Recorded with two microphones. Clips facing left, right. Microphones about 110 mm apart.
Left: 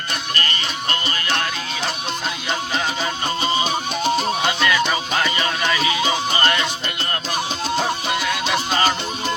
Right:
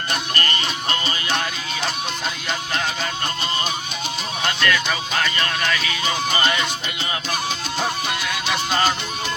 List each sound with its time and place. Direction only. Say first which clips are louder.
0.9 s music: left 2 dB; 15° right (ahead or behind)
4.4 s music: right 3 dB; 10° left (ahead or behind)